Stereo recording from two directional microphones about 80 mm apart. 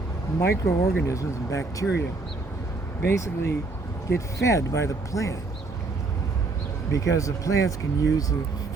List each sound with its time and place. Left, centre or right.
0.3 s speech: left
3.1 s speech: left
7.0 s speech: left